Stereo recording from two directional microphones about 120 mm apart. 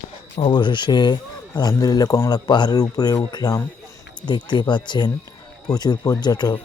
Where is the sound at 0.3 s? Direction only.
45° left (ahead or behind).